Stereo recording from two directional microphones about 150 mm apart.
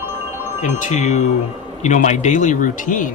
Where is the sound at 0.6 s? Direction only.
55° left (ahead or behind).